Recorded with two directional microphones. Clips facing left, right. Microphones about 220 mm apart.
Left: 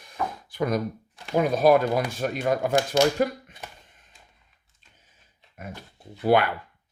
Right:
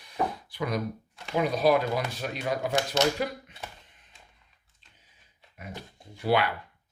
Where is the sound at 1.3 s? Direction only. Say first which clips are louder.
Left 4 dB; 50° left (ahead or behind).